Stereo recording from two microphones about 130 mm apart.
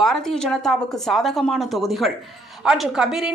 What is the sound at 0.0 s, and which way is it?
Speech, 5° left (ahead or behind).